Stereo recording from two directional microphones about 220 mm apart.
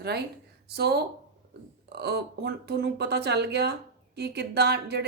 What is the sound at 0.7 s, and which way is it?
Speech, 45° right (ahead or behind).